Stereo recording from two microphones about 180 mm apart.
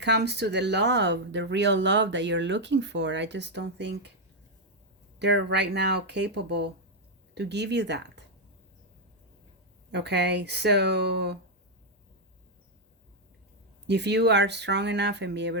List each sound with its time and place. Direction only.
0.0 s speech: 70° right (ahead or behind)
5.2 s speech: 70° right (ahead or behind)
9.9 s speech: 70° right (ahead or behind)
13.8 s speech: 70° right (ahead or behind)